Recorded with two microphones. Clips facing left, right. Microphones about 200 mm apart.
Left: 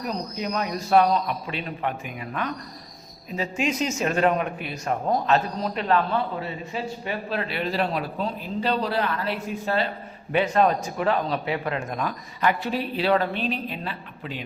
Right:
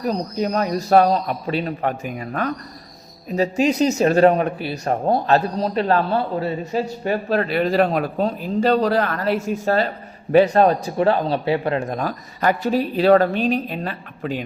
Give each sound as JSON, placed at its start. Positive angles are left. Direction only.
{"t": 0.0, "sound": "speech", "side_deg": -40}